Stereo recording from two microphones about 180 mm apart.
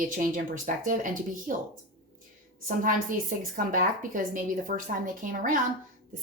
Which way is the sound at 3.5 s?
50° right (ahead or behind).